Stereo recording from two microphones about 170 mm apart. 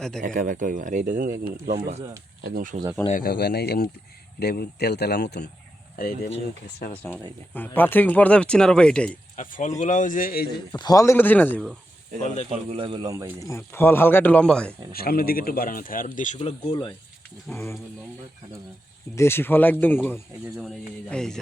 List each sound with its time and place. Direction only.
0.2 s speech: 50° right (ahead or behind)
1.7 s speech: 45° right (ahead or behind)
3.1 s speech: 60° left (ahead or behind); by 5.5 s 75° left (ahead or behind)
7.0 s speech: 10° left (ahead or behind)
9.3 s speech: 50° left (ahead or behind)
10.8 s speech: 20° left (ahead or behind)
12.2 s speech: 45° left (ahead or behind)
12.5 s speech: 35° right (ahead or behind)
13.4 s speech: 15° left (ahead or behind)
14.9 s speech: 60° left (ahead or behind)
16.4 s speech: 30° left (ahead or behind)
19.1 s speech: 15° left (ahead or behind)